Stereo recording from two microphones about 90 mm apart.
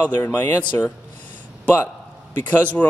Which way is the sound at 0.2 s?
25° left (ahead or behind).